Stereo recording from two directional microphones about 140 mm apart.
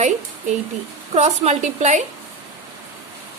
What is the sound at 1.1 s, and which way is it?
Speech, 50° right (ahead or behind).